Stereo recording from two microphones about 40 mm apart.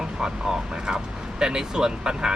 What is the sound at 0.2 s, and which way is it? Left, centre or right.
Speech, centre.